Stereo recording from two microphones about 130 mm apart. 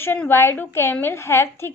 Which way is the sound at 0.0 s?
15° left (ahead or behind).